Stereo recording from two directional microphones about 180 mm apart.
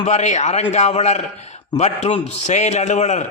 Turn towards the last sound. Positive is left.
turn(degrees=40)  # may be behind; listen again after turning